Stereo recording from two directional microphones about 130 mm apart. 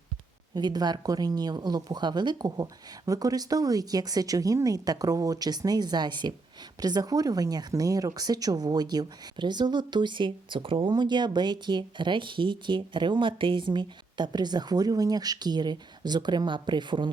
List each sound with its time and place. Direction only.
0.5 s speech: 30° right (ahead or behind)